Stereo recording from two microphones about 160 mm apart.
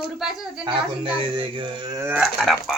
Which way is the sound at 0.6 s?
30° right (ahead or behind).